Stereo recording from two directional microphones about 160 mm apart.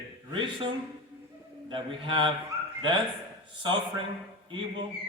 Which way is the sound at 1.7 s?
35° right (ahead or behind).